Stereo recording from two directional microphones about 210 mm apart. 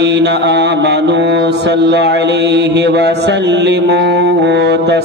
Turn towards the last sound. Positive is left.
turn(degrees=-55)  # may be behind; listen again after turning